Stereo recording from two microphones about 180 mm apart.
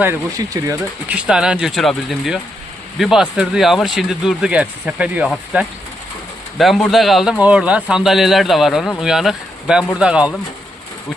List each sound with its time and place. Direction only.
0.0 s speech: 15° right (ahead or behind)
1.1 s a man's voice: 5° right (ahead or behind)
6.6 s a man's voice: centre (ahead or behind)